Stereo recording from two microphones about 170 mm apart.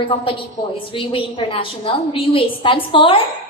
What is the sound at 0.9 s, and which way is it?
A woman's voice, 30° left (ahead or behind).